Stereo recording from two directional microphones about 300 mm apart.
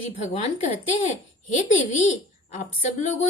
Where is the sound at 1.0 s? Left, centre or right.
Left.